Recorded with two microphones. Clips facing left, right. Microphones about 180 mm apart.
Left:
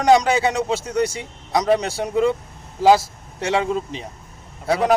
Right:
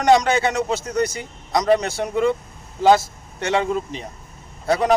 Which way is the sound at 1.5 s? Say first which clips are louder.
Right 1 dB; 10° left (ahead or behind).